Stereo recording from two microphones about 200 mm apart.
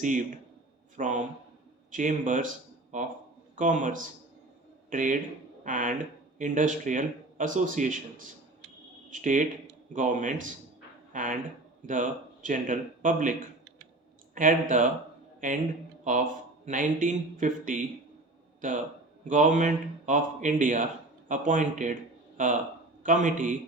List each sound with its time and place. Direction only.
0.0 s speech: 40° right (ahead or behind)
9.0 s speech: 40° right (ahead or behind)
14.3 s a man's voice: 40° right (ahead or behind)
19.2 s speech: 40° right (ahead or behind)